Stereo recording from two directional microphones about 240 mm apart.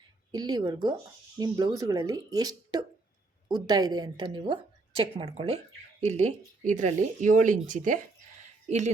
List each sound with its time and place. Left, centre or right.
0.3 s speech: centre; by 7.9 s right